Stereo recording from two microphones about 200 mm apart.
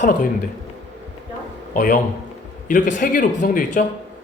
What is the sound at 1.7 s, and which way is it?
A man's voice, 40° left (ahead or behind).